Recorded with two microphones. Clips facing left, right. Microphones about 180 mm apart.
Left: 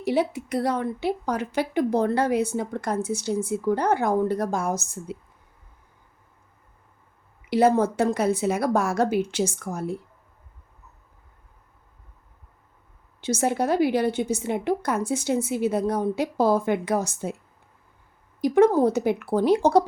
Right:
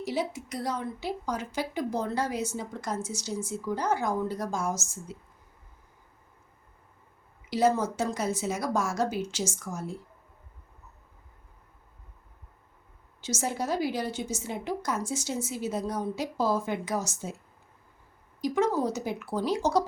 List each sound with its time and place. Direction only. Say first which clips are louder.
0.0 s a woman's voice: left 7 dB; 60° left (ahead or behind)
7.5 s a woman's voice: left 6 dB; 60° left (ahead or behind)
13.2 s a woman's voice: left 8 dB; 60° left (ahead or behind)
18.3 s a woman's voice: left 9 dB; 55° left (ahead or behind)